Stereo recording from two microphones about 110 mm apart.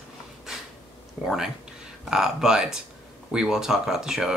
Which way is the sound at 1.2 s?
Centre (ahead or behind).